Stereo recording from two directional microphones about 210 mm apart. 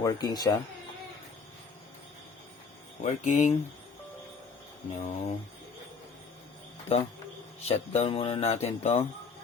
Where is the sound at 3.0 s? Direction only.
35° left (ahead or behind).